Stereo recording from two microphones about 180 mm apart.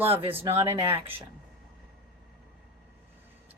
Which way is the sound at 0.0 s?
30° right (ahead or behind).